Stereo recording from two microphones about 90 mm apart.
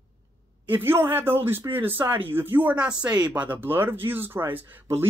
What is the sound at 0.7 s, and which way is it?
Speech, 25° right (ahead or behind).